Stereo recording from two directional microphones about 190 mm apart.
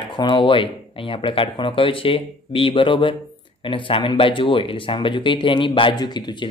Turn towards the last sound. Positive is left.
turn(degrees=20)  # may be behind; listen again after turning